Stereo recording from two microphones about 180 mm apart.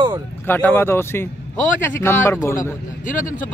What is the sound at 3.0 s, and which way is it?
Speech, 45° left (ahead or behind).